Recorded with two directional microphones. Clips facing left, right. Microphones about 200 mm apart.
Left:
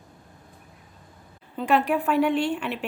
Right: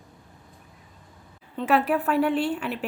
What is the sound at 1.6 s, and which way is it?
Speech, 5° right (ahead or behind).